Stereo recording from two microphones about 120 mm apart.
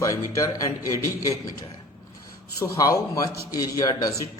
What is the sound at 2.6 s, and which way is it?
Speech, 30° left (ahead or behind).